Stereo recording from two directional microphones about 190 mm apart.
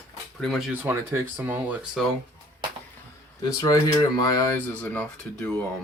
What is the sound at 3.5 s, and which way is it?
Speech, 20° left (ahead or behind).